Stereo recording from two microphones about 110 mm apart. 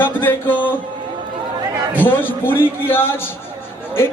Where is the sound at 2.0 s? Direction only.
20° left (ahead or behind).